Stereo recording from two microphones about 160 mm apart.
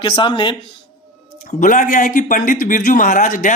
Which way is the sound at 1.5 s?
55° left (ahead or behind).